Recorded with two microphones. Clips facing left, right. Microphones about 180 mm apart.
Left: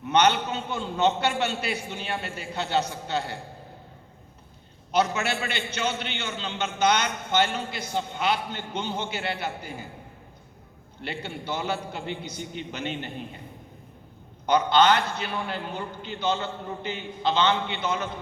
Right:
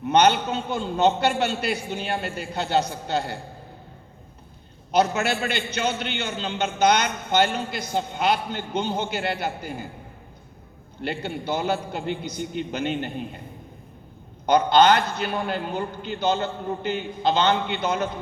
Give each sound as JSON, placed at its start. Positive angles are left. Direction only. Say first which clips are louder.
{"t": 0.0, "sound": "a man's voice", "louder": "right 3 dB", "side_deg": -40}
{"t": 4.9, "sound": "a man's voice", "louder": "right 3 dB", "side_deg": -40}
{"t": 11.0, "sound": "a man's voice", "louder": "right 5 dB", "side_deg": -40}
{"t": 14.4, "sound": "a man's voice", "louder": "right 3 dB", "side_deg": -40}